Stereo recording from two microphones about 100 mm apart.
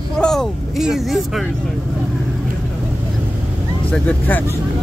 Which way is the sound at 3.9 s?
20° left (ahead or behind).